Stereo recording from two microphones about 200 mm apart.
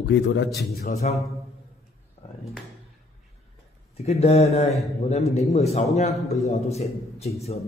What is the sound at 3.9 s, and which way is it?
A man's voice, 30° left (ahead or behind).